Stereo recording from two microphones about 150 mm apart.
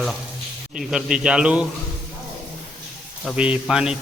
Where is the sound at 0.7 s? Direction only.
5° right (ahead or behind).